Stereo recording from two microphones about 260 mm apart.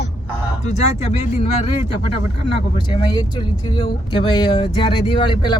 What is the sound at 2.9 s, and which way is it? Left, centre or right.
Speech, centre.